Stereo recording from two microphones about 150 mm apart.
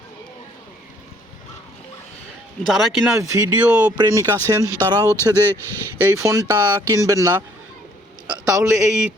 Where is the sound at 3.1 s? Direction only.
20° right (ahead or behind).